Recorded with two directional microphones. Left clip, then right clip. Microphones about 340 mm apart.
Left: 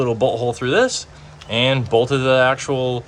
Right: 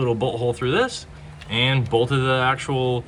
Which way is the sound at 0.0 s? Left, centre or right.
Centre.